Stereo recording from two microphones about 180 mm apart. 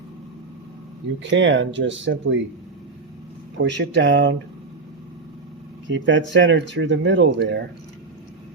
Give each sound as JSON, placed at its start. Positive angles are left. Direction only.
{"t": 1.2, "sound": "speech", "side_deg": -90}
{"t": 3.6, "sound": "speech", "side_deg": -75}
{"t": 5.9, "sound": "speech", "side_deg": -90}